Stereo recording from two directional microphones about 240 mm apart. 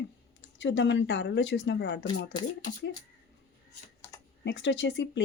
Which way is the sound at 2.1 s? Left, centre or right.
Centre.